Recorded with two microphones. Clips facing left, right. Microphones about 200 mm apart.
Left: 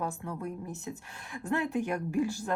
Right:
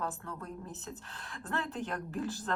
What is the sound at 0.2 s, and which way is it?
A woman's voice, 15° left (ahead or behind).